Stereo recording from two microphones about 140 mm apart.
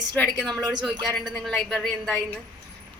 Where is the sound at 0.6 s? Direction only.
30° right (ahead or behind).